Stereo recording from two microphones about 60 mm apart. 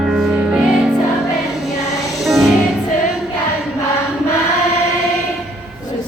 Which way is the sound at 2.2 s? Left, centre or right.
Centre.